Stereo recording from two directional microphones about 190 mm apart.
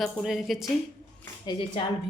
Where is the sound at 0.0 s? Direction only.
Centre (ahead or behind).